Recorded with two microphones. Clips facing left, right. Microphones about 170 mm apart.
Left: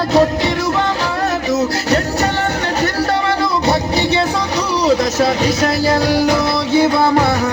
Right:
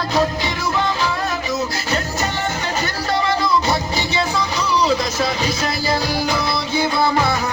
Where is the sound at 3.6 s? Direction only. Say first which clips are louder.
Left 6 dB; 65° left (ahead or behind).